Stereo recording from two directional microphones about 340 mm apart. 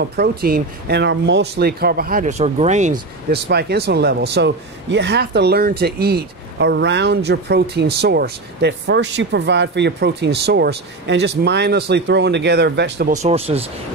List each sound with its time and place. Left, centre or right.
0.0 s speech: right